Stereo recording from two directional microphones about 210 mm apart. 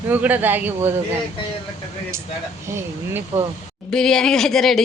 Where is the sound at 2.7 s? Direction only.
10° right (ahead or behind).